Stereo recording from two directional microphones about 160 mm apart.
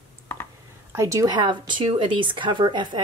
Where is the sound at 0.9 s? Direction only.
20° right (ahead or behind).